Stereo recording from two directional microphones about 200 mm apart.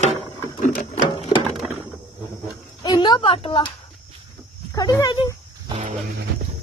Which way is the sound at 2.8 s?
20° left (ahead or behind).